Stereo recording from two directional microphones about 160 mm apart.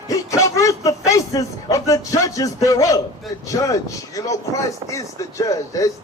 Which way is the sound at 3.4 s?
20° left (ahead or behind).